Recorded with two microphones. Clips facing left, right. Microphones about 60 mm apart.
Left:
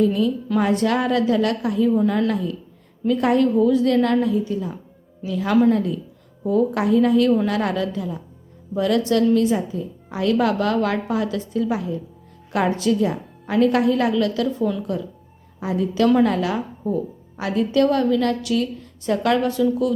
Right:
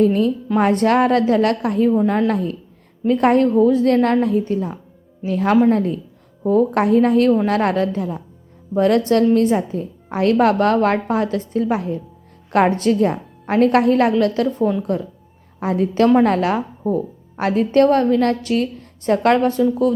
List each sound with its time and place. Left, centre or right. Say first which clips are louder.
0.0 s a woman's voice: right 3 dB; right
15.6 s a woman's voice: right 3 dB; right